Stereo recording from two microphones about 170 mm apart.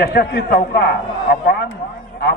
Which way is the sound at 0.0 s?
70° left (ahead or behind).